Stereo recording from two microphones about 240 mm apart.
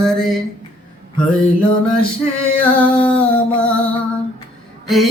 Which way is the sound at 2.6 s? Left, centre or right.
Centre.